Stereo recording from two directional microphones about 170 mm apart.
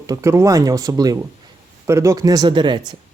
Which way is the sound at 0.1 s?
15° right (ahead or behind).